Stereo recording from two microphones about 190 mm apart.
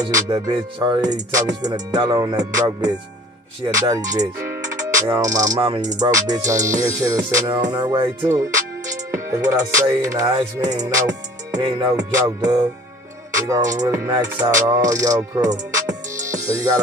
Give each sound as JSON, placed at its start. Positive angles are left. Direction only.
{"t": 0.1, "sound": "music", "side_deg": -25}
{"t": 5.6, "sound": "music", "side_deg": -35}
{"t": 5.9, "sound": "music", "side_deg": -20}
{"t": 10.3, "sound": "music", "side_deg": -40}
{"t": 10.8, "sound": "music", "side_deg": -20}